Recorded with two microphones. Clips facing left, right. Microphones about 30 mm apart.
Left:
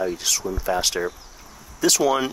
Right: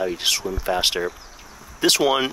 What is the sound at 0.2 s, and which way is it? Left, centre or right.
Speech, right.